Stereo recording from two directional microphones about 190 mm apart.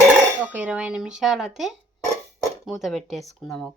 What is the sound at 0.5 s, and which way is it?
Speech, 5° right (ahead or behind).